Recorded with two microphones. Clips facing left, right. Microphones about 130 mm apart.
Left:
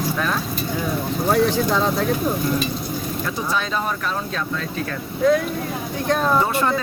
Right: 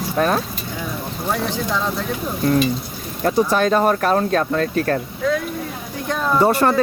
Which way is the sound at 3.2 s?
50° right (ahead or behind).